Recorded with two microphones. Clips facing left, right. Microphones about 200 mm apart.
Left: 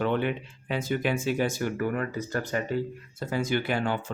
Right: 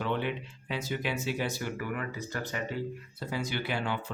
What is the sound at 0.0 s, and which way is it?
Speech, 50° left (ahead or behind).